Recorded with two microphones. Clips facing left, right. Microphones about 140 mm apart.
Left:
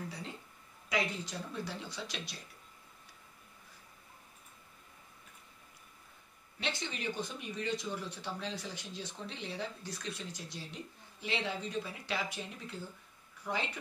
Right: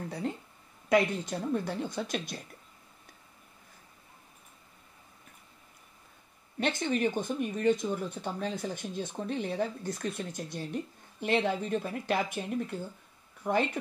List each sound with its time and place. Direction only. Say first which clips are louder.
0.8 s speech: right 9 dB; 55° right (ahead or behind)
6.6 s speech: right 10 dB; 50° right (ahead or behind)